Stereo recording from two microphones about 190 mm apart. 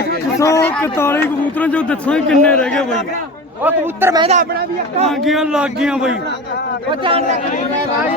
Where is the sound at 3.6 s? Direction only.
10° right (ahead or behind).